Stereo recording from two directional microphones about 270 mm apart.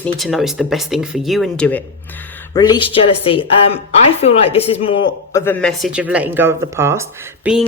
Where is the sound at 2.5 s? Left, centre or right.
Centre.